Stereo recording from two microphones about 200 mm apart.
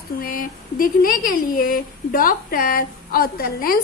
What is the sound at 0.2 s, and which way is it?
A woman's voice, 45° left (ahead or behind).